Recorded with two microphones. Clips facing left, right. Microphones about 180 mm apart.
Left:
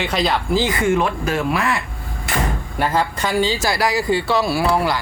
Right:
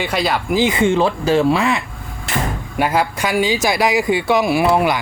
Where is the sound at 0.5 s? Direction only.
20° right (ahead or behind).